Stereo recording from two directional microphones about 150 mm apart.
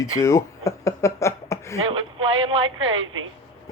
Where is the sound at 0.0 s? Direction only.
20° left (ahead or behind).